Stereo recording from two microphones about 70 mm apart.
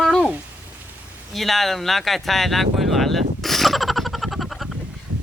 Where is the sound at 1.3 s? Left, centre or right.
Centre.